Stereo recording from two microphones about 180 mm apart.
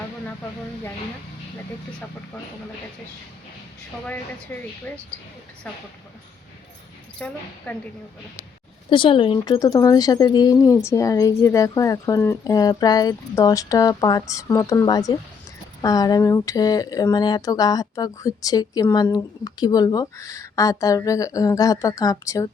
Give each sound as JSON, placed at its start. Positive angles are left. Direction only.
{"t": 4.9, "sound": "a woman's voice", "side_deg": 10}
{"t": 7.2, "sound": "a woman's voice", "side_deg": 10}
{"t": 8.9, "sound": "speech", "side_deg": 30}